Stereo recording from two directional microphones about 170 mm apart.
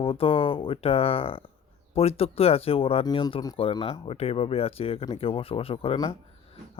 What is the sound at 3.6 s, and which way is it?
Speech, 35° left (ahead or behind).